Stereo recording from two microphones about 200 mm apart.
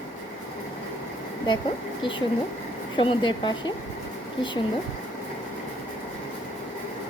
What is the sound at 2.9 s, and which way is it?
Speech, 25° left (ahead or behind).